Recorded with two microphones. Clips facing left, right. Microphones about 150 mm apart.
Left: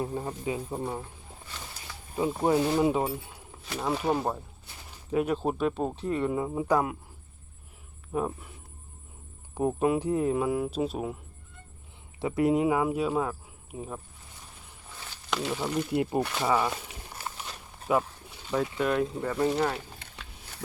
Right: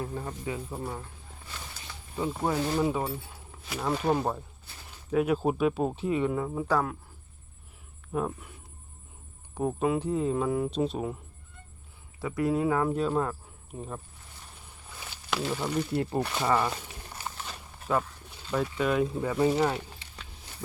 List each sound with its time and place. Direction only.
0.0 s speech: 20° left (ahead or behind)
2.1 s speech: 20° left (ahead or behind)
3.7 s speech: centre (ahead or behind)
6.3 s speech: 10° left (ahead or behind)
8.1 s speech: 5° left (ahead or behind)
9.6 s speech: 10° left (ahead or behind)
12.2 s speech: 25° left (ahead or behind); by 14.0 s 5° left (ahead or behind)
15.1 s speech: 5° right (ahead or behind)
15.9 s speech: 15° left (ahead or behind)
16.2 s speech: centre (ahead or behind)
17.4 s walk: 10° left (ahead or behind)
18.5 s speech: centre (ahead or behind)